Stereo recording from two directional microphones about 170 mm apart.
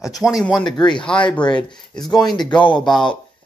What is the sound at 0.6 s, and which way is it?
Speech, 25° left (ahead or behind).